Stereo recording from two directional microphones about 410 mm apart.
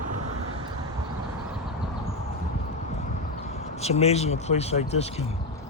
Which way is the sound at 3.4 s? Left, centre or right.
Centre.